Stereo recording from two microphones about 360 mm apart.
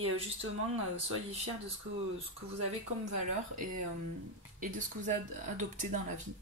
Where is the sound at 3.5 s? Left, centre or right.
Right.